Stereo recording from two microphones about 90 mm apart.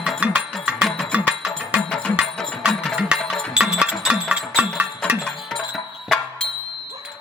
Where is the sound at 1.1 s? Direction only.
15° right (ahead or behind).